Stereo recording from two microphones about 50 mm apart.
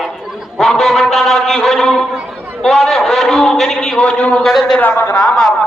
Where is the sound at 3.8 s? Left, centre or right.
Centre.